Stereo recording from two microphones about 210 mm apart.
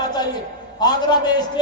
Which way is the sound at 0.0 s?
20° left (ahead or behind).